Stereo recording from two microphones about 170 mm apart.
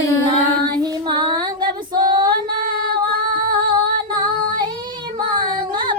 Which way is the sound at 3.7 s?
25° right (ahead or behind).